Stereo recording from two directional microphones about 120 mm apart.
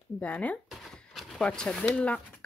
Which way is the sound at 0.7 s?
Centre (ahead or behind).